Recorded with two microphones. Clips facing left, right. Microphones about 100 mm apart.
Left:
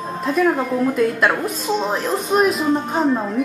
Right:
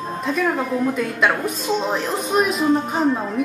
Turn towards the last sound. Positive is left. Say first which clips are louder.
# left 1 dB
turn(degrees=0)  # may be behind; listen again after turning